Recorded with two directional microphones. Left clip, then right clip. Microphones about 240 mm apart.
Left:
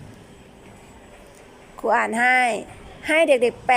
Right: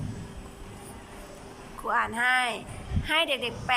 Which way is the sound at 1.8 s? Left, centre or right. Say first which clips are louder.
Left 7 dB; left.